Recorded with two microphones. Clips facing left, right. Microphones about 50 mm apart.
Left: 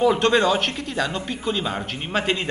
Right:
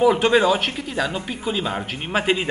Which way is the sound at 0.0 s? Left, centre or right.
Centre.